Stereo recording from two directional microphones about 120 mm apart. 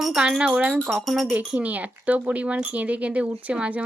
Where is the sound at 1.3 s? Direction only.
15° right (ahead or behind).